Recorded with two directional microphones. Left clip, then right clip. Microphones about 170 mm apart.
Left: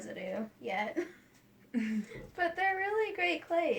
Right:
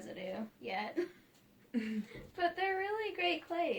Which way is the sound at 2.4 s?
25° left (ahead or behind).